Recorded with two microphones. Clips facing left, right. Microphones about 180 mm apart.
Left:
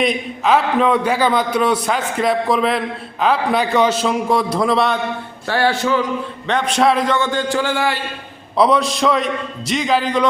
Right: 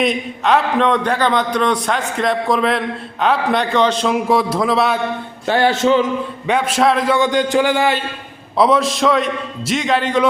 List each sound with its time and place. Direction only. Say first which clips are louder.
0.0 s a man's voice: even; centre (ahead or behind)
5.5 s music: right 3 dB; 20° right (ahead or behind)
6.5 s a man's voice: right 1 dB; 5° right (ahead or behind)
7.2 s a man's voice: right 4 dB; 15° right (ahead or behind)
8.5 s a man's voice: right 1 dB; centre (ahead or behind)